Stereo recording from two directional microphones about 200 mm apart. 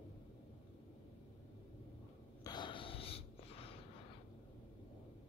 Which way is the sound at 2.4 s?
20° left (ahead or behind).